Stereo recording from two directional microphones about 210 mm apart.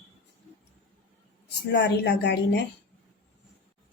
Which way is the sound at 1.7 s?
55° left (ahead or behind).